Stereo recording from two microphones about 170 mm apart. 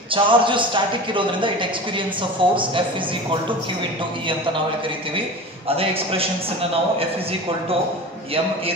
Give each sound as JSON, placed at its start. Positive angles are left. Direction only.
{"t": 0.1, "sound": "a man's voice", "side_deg": -30}
{"t": 5.8, "sound": "a man's voice", "side_deg": -35}